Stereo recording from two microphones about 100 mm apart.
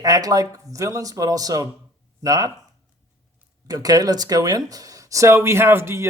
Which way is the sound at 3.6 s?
40° right (ahead or behind).